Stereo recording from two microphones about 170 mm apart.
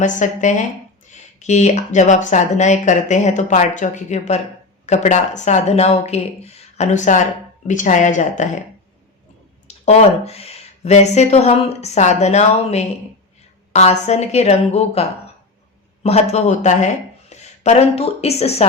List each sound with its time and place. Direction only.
0.0 s speech: 45° left (ahead or behind)
9.6 s speech: 40° left (ahead or behind)
16.0 s speech: 40° left (ahead or behind)